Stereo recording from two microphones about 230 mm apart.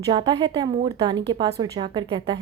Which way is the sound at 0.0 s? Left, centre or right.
Centre.